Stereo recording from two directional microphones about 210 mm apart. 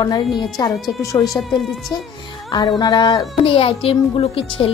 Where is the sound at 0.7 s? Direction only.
Centre (ahead or behind).